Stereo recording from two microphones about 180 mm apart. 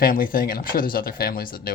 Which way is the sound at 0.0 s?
55° left (ahead or behind).